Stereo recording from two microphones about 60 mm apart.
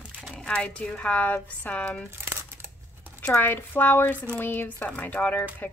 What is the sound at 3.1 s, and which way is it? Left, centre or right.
Speech, left.